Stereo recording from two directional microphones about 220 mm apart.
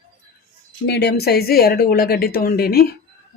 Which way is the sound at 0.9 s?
50° left (ahead or behind).